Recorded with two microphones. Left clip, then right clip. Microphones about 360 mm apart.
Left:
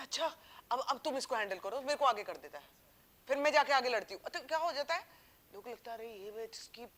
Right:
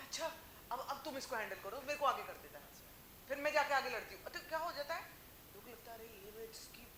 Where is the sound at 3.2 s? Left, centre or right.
Left.